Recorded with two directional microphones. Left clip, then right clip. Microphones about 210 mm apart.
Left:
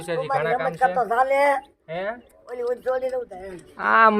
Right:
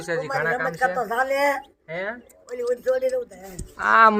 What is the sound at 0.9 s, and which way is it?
Speech, 20° left (ahead or behind).